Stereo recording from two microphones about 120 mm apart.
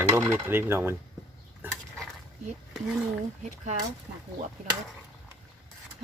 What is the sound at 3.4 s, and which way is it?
Speech, 75° right (ahead or behind).